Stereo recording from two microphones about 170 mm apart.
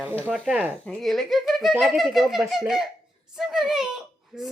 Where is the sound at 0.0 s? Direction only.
10° right (ahead or behind).